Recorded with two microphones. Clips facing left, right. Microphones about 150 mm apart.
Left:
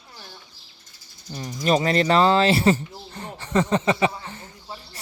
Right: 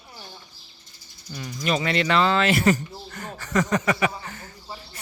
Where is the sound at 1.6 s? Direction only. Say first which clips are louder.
Left 4 dB; 35° left (ahead or behind).